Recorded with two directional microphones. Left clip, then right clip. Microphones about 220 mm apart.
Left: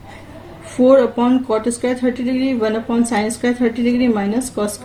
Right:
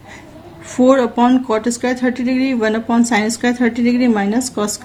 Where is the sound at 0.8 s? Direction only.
50° right (ahead or behind).